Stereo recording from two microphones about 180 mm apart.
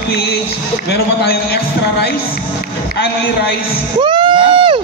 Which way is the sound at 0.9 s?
65° left (ahead or behind).